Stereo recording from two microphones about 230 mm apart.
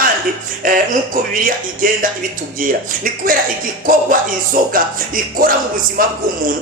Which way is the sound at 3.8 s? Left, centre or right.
Right.